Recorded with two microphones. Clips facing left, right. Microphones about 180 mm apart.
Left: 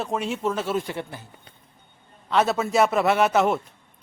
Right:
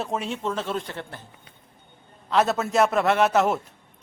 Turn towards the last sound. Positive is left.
turn(degrees=0)  # may be behind; listen again after turning